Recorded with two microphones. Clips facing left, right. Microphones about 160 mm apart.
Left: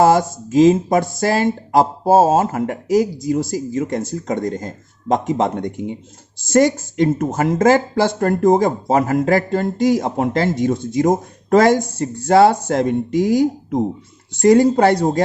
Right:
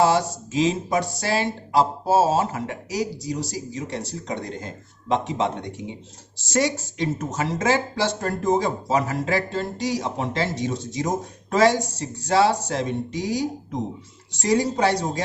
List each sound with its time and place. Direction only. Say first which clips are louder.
0.0 s speech: left 6 dB; 50° left (ahead or behind)